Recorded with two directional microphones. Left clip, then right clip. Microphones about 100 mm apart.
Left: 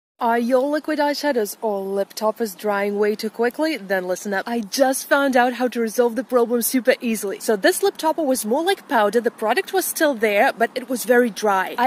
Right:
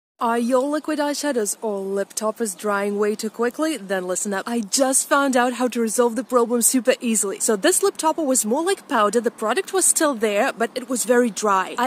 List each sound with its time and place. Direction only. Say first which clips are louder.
0.2 s speech: left 2 dB; 30° right (ahead or behind)